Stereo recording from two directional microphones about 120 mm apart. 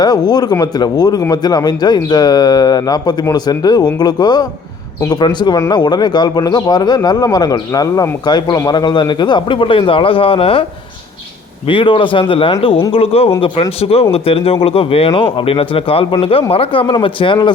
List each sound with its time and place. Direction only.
0.0 s a man's voice: 35° left (ahead or behind)